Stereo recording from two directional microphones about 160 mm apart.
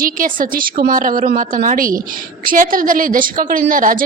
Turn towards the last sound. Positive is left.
turn(degrees=-60)  # may be behind; listen again after turning